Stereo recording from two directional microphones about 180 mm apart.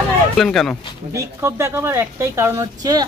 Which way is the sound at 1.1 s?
15° right (ahead or behind).